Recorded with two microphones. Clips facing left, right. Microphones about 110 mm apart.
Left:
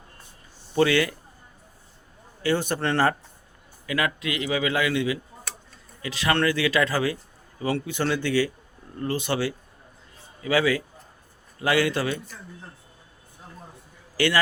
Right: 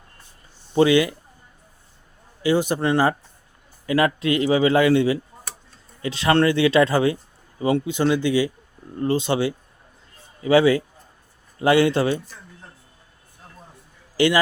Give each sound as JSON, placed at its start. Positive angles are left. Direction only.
{"t": 0.8, "sound": "speech", "side_deg": -20}
{"t": 2.4, "sound": "speech", "side_deg": -15}
{"t": 3.8, "sound": "speech", "side_deg": -30}
{"t": 14.2, "sound": "speech", "side_deg": -20}